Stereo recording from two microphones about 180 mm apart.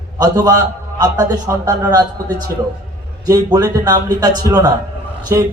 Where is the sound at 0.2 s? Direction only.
20° right (ahead or behind).